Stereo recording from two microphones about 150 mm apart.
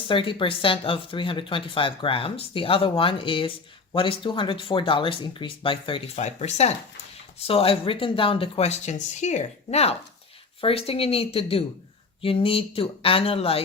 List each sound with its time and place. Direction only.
0.1 s speech: 35° left (ahead or behind)